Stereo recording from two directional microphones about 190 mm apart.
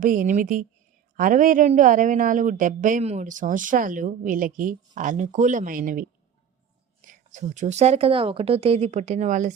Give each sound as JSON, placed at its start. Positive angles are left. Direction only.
{"t": 0.0, "sound": "speech", "side_deg": -45}
{"t": 7.1, "sound": "a woman's voice", "side_deg": -40}